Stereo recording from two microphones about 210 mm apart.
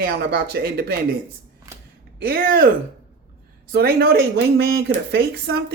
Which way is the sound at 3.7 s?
45° right (ahead or behind).